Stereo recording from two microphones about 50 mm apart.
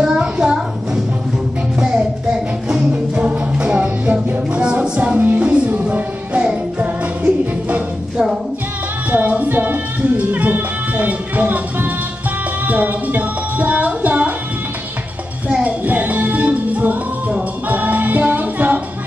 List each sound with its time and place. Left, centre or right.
0.0 s a sound: centre
1.8 s music: centre; by 6.4 s right
9.1 s music: right
15.4 s music: right